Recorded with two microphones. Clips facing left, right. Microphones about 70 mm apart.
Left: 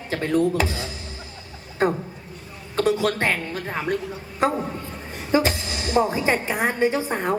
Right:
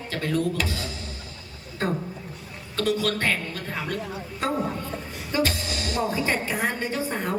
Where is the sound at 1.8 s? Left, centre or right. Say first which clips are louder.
Left 5 dB; left.